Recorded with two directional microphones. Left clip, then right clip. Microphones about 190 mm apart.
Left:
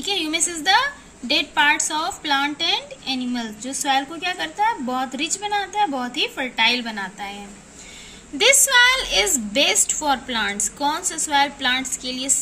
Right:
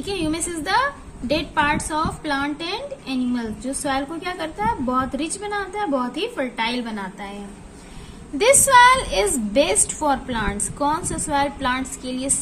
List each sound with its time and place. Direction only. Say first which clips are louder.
0.0 s a woman's voice: left 2 dB; 25° left (ahead or behind)
8.4 s a woman's voice: right 2 dB; 15° left (ahead or behind)